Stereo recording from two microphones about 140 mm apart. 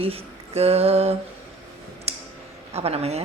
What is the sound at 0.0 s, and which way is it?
Speech, 45° right (ahead or behind).